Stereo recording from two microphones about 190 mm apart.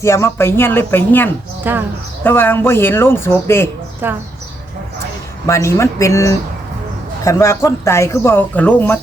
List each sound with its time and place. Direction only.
0.0 s speech: 15° left (ahead or behind)
1.7 s speech: 10° right (ahead or behind)
2.2 s speech: 10° left (ahead or behind)
4.0 s speech: 10° right (ahead or behind)
5.5 s speech: 15° left (ahead or behind)